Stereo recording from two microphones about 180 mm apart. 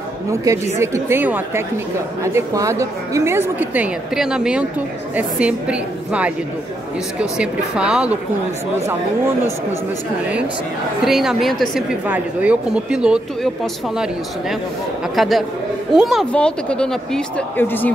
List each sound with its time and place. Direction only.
0.7 s a woman's voice: 15° right (ahead or behind)
11.1 s a woman's voice: centre (ahead or behind)
15.1 s a woman's voice: centre (ahead or behind)